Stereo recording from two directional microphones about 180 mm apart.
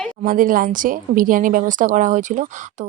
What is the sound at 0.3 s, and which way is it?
A woman's voice, 50° right (ahead or behind).